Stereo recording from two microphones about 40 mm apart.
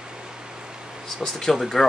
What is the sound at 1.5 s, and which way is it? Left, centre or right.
Speech, centre.